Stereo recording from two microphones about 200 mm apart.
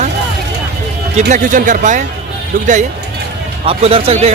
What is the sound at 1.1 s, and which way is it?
Speech, 35° right (ahead or behind).